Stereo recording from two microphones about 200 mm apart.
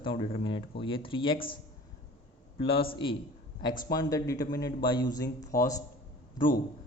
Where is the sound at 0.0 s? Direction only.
25° left (ahead or behind).